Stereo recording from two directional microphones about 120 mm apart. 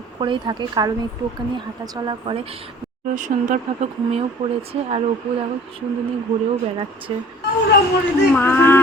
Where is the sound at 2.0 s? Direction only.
50° right (ahead or behind).